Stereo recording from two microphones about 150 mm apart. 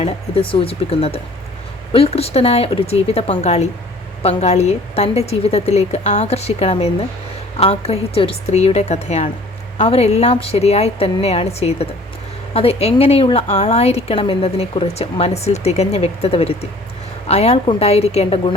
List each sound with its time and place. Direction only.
0.0 s a woman's voice: 40° left (ahead or behind)